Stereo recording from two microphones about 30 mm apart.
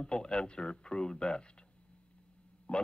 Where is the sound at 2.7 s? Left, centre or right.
Left.